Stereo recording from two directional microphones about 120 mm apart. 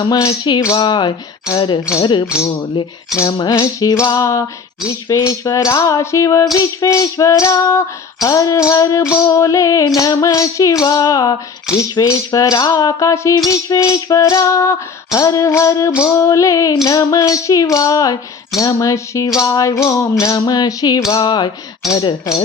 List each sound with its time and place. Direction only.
0.3 s rattle: 40° left (ahead or behind)
3.5 s music: 30° left (ahead or behind)
10.8 s rattle: 30° left (ahead or behind)
11.9 s music: 30° left (ahead or behind)
19.4 s rattle: 30° left (ahead or behind)
21.9 s music: 30° left (ahead or behind)